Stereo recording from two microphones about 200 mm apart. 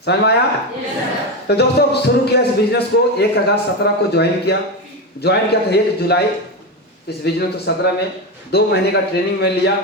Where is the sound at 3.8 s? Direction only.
55° left (ahead or behind).